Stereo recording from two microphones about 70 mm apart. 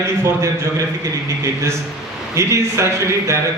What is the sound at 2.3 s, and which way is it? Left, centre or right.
A man's voice, right.